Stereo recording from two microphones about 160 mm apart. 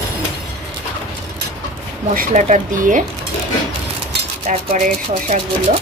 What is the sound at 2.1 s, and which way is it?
Speech, 55° right (ahead or behind).